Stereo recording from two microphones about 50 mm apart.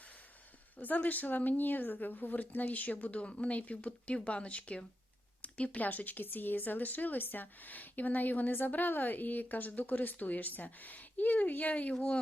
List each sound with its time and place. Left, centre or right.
0.8 s speech: left